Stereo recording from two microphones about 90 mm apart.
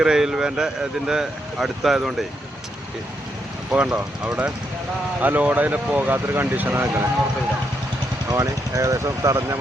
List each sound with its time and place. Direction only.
0.0 s speech: 5° right (ahead or behind)
3.7 s speech: 10° right (ahead or behind)
8.3 s speech: 35° right (ahead or behind)